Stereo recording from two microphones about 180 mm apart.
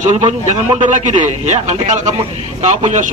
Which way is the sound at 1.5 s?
40° right (ahead or behind).